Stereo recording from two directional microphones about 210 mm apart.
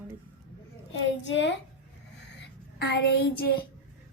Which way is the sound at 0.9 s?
60° left (ahead or behind).